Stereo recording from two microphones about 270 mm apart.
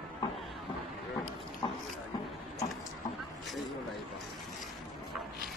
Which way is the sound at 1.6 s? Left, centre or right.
Centre.